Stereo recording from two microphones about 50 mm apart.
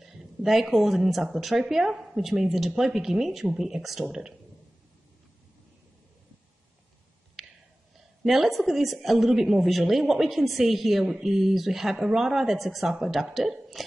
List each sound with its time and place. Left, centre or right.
0.0 s a woman's voice: centre
7.4 s a sound: centre
8.2 s a woman's voice: centre